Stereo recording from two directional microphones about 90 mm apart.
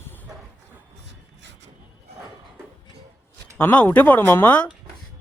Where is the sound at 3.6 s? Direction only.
20° left (ahead or behind).